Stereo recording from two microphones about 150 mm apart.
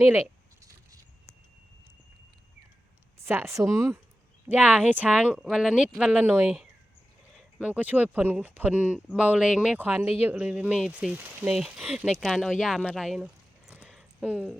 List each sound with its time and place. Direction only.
0.0 s a sound: 15° right (ahead or behind)
3.2 s speech: 15° right (ahead or behind)
7.6 s speech: 10° right (ahead or behind)